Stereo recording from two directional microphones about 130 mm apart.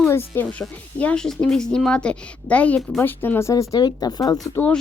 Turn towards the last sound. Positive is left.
turn(degrees=30)  # may be behind; listen again after turning